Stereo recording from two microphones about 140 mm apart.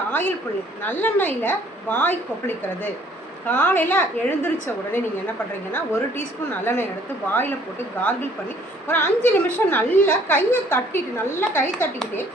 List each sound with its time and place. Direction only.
0.1 s a woman's voice: 15° left (ahead or behind)
8.9 s a woman's voice: 15° left (ahead or behind)